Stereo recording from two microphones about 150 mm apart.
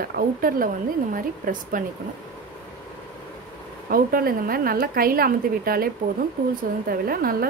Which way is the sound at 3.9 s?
75° right (ahead or behind).